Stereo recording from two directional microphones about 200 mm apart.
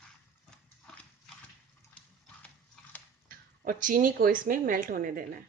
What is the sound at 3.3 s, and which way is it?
A woman's voice, 45° right (ahead or behind).